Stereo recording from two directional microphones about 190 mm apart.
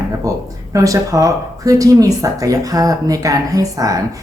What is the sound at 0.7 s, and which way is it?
Speech, 15° right (ahead or behind).